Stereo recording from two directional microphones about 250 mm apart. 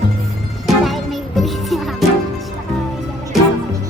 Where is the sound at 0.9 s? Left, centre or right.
Centre.